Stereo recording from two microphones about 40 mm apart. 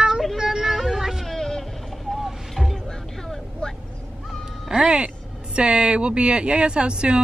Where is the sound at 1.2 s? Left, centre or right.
Centre.